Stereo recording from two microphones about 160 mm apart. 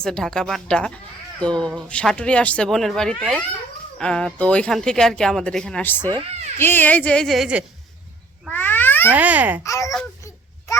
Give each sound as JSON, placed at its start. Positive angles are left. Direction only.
{"t": 0.0, "sound": "speech", "side_deg": 5}
{"t": 8.4, "sound": "cat", "side_deg": 10}
{"t": 9.1, "sound": "speech", "side_deg": -10}
{"t": 9.6, "sound": "a sound", "side_deg": 20}